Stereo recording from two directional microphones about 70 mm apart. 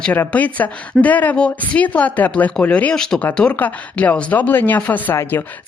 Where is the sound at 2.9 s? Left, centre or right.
Centre.